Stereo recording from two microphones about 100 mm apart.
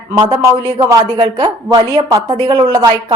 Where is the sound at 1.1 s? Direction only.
45° right (ahead or behind).